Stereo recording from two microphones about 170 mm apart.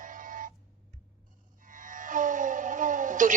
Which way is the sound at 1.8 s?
50° right (ahead or behind).